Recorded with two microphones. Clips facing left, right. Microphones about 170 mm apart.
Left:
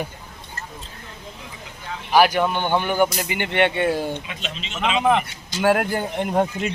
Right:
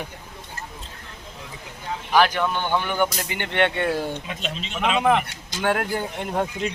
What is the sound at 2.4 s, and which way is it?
Speech, 20° left (ahead or behind).